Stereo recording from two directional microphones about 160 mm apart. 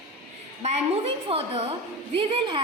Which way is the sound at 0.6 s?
40° right (ahead or behind).